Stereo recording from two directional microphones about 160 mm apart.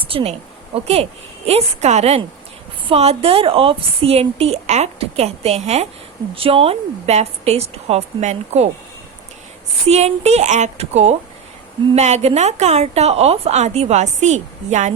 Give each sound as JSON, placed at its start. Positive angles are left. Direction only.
{"t": 0.1, "sound": "a woman's voice", "side_deg": -35}
{"t": 9.8, "sound": "a woman's voice", "side_deg": -40}